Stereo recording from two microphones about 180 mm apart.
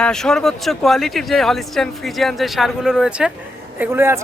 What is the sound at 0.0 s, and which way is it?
Speech, 5° left (ahead or behind).